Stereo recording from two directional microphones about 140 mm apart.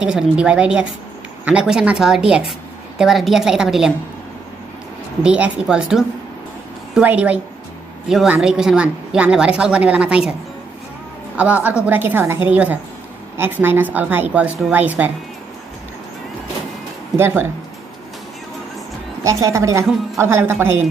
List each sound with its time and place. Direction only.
0.0 s a woman's voice: 5° right (ahead or behind)
5.2 s a woman's voice: 5° right (ahead or behind)
11.3 s a woman's voice: 10° right (ahead or behind)
17.2 s a woman's voice: 15° right (ahead or behind)
19.2 s a woman's voice: 20° right (ahead or behind)